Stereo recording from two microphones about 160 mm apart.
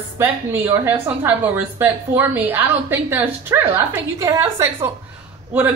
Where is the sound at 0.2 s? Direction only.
15° right (ahead or behind).